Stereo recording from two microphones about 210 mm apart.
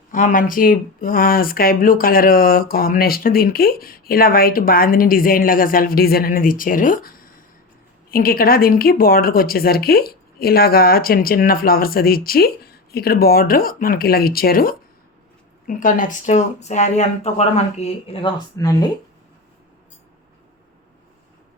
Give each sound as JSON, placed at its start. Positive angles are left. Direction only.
{"t": 0.1, "sound": "speech", "side_deg": 40}